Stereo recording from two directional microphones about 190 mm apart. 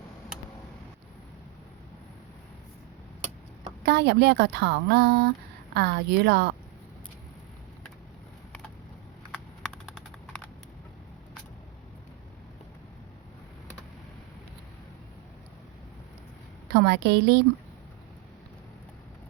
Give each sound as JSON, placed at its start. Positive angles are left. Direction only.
{"t": 3.8, "sound": "a woman's voice", "side_deg": -60}
{"t": 16.7, "sound": "a woman's voice", "side_deg": -60}